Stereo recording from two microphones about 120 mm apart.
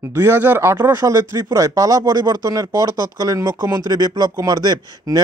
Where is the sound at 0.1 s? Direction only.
20° right (ahead or behind).